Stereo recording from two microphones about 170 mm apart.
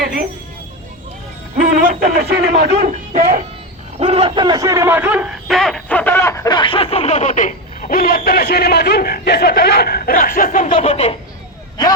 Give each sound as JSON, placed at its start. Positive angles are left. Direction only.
{"t": 1.6, "sound": "speech", "side_deg": -55}
{"t": 3.1, "sound": "speech", "side_deg": -50}
{"t": 3.9, "sound": "speech", "side_deg": -35}
{"t": 10.8, "sound": "speech", "side_deg": 35}